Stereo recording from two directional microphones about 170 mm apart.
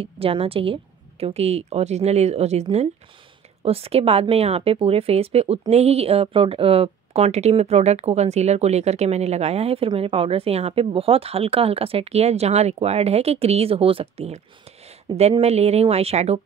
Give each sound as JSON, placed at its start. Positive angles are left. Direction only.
{"t": 0.0, "sound": "speech", "side_deg": -35}